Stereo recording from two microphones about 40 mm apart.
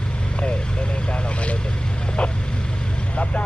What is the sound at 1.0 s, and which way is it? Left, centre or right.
Vehicle, left.